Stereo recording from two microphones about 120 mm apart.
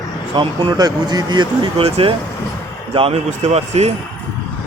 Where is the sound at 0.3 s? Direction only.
35° right (ahead or behind).